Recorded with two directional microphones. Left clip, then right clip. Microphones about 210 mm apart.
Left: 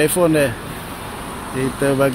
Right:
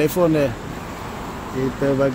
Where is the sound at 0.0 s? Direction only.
5° left (ahead or behind).